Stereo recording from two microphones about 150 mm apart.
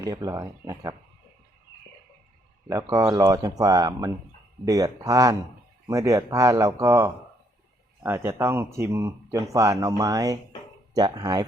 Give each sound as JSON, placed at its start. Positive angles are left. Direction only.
{"t": 0.0, "sound": "speech", "side_deg": -25}
{"t": 2.6, "sound": "speech", "side_deg": -25}